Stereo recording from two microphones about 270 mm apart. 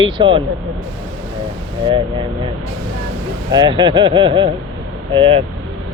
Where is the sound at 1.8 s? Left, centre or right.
Centre.